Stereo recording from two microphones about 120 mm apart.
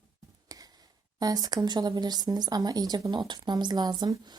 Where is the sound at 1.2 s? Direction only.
30° right (ahead or behind).